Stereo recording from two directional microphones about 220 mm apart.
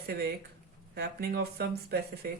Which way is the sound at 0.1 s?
45° right (ahead or behind).